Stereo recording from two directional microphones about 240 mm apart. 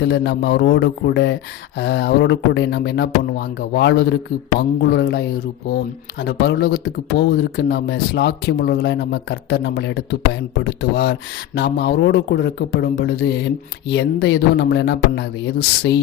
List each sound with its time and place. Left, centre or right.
0.0 s speech: left
6.2 s speech: left